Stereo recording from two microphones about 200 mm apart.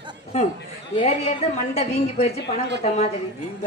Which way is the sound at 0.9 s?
30° left (ahead or behind).